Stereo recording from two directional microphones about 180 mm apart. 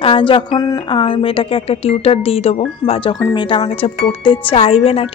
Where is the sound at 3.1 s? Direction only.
25° left (ahead or behind).